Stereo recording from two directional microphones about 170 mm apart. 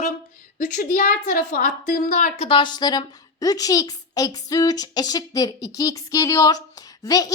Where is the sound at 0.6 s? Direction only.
50° left (ahead or behind).